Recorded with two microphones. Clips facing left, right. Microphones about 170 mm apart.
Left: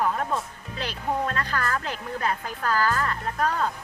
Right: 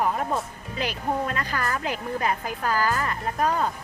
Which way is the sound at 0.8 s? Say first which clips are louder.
Right 1 dB; 15° right (ahead or behind).